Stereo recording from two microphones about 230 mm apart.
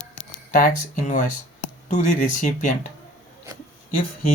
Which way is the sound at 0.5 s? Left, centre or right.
Left.